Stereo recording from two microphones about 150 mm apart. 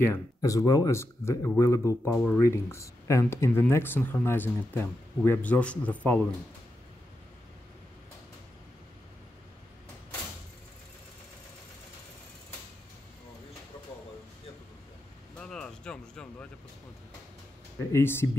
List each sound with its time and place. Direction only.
0.0 s speech: 20° left (ahead or behind)
15.3 s a sound: 5° left (ahead or behind)
17.9 s speech: 15° left (ahead or behind)